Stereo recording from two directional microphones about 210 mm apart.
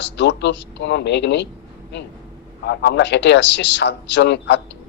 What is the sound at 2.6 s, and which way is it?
A man's voice, 55° left (ahead or behind).